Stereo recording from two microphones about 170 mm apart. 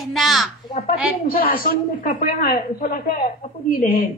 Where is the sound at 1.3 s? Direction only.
60° left (ahead or behind).